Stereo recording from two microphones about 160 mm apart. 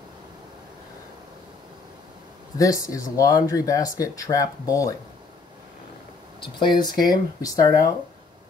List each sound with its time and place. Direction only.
2.5 s speech: 20° left (ahead or behind)
6.4 s speech: 30° left (ahead or behind)